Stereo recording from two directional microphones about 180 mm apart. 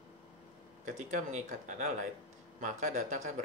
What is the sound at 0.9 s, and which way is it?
Speech, 40° right (ahead or behind).